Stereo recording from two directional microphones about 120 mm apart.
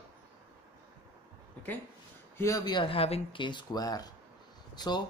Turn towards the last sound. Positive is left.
turn(degrees=35)  # may be behind; listen again after turning